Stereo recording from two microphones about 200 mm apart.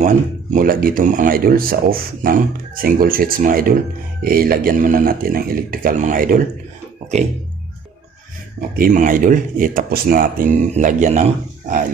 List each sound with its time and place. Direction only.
0.0 s speech: 40° right (ahead or behind)
8.7 s speech: 45° right (ahead or behind)